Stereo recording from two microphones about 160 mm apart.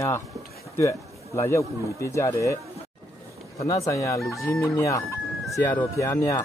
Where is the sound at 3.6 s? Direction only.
20° left (ahead or behind).